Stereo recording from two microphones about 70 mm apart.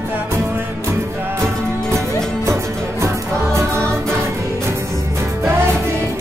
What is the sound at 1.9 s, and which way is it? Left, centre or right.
Music, right.